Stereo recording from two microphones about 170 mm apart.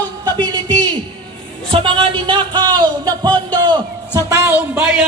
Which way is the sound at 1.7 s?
30° right (ahead or behind).